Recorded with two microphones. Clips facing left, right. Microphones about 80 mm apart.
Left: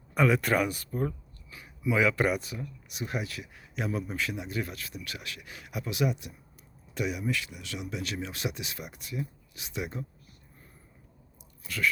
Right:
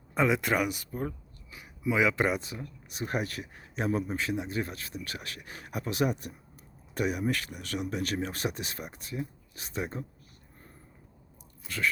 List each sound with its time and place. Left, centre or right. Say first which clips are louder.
0.1 s speech: left 1 dB; right